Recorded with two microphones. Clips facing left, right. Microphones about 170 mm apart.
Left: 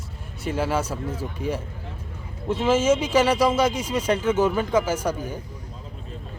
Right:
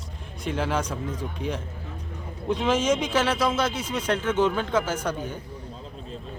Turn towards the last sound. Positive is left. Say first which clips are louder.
# left 3 dB
turn(degrees=10)  # may be behind; listen again after turning